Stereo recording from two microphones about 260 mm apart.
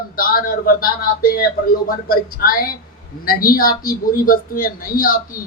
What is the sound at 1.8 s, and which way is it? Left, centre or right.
A woman's voice, left.